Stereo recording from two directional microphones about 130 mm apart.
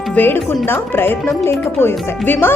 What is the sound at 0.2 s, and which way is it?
Speech, 15° left (ahead or behind).